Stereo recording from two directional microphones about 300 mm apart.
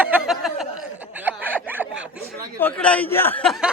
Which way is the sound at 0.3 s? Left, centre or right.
Centre.